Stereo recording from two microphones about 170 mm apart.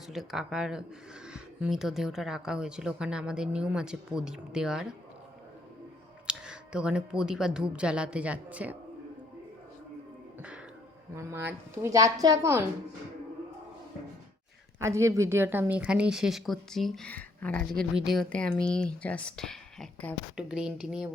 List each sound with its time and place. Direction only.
0.1 s a woman's voice: centre (ahead or behind)
6.2 s speech: 5° right (ahead or behind)
11.1 s a woman's voice: 15° right (ahead or behind)
14.8 s a woman's voice: 15° right (ahead or behind)